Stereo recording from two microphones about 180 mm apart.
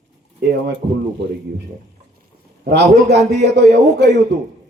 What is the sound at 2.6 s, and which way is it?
Speech, 70° right (ahead or behind).